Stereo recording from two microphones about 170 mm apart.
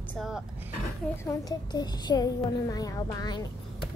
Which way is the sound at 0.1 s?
Centre (ahead or behind).